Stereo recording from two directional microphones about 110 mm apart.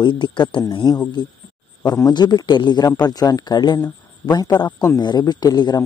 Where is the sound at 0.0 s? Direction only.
45° left (ahead or behind).